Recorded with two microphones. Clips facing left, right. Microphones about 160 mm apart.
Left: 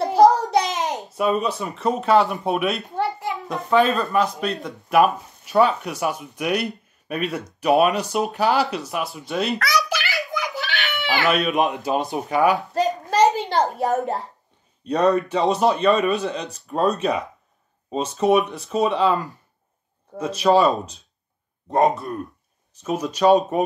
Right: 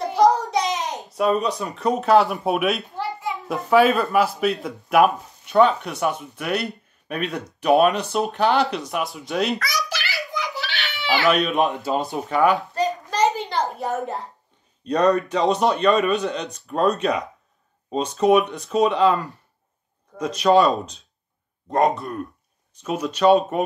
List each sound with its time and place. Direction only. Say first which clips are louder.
0.0 s child singing: left 3 dB; 35° left (ahead or behind)
0.9 s speech: right 2 dB; centre (ahead or behind)
7.2 s speech: left 1 dB; 5° left (ahead or behind)
9.6 s a sound: left 5 dB; 60° left (ahead or behind)
10.3 s chicken: left 2 dB; 45° left (ahead or behind)
11.2 s speech: right 1 dB; centre (ahead or behind)
11.6 s speech: even; 15° left (ahead or behind)
13.5 s a sound: left 4 dB; 40° left (ahead or behind)
14.9 s speech: even; 5° left (ahead or behind)